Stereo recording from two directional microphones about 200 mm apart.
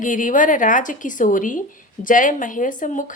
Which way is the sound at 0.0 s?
40° left (ahead or behind).